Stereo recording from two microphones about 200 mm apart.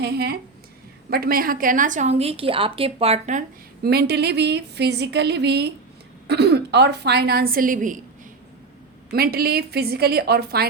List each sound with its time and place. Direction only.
0.0 s a woman's voice: 55° right (ahead or behind); by 3.4 s 35° right (ahead or behind)
3.8 s speech: 55° right (ahead or behind)
9.0 s a woman's voice: 50° right (ahead or behind)